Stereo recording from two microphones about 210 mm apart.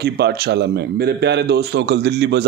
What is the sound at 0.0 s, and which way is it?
Speech, 50° right (ahead or behind).